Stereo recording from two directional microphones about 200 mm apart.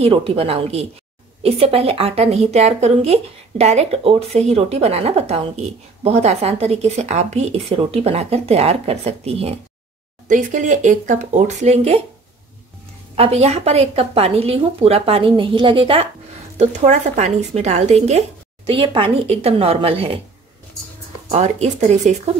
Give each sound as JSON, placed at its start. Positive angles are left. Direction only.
{"t": 0.0, "sound": "a woman's voice", "side_deg": -30}
{"t": 13.1, "sound": "a woman's voice", "side_deg": -30}
{"t": 21.3, "sound": "speech", "side_deg": -35}